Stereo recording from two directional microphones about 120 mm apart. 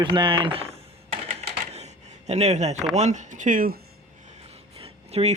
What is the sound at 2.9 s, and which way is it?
Speech, 75° right (ahead or behind).